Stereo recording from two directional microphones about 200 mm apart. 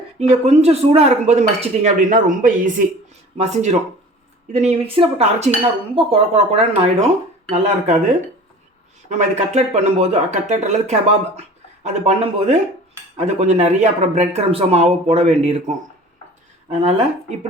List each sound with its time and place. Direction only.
0.2 s speech: 35° right (ahead or behind)